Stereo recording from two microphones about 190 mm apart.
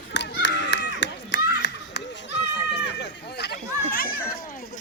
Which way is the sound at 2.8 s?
65° left (ahead or behind).